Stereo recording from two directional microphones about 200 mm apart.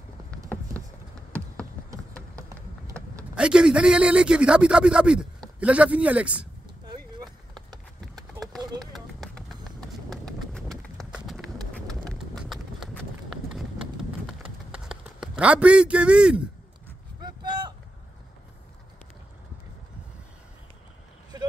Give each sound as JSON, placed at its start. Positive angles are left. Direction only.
{"t": 3.3, "sound": "speech", "side_deg": -5}
{"t": 8.9, "sound": "run", "side_deg": 0}
{"t": 12.4, "sound": "clip-clop", "side_deg": 0}
{"t": 14.9, "sound": "a man's voice", "side_deg": -5}
{"t": 17.2, "sound": "a sound", "side_deg": -20}
{"t": 21.3, "sound": "vehicle", "side_deg": -20}